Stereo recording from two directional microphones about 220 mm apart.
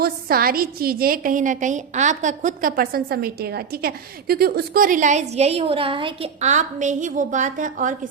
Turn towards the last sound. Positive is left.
turn(degrees=-35)  # may be behind; listen again after turning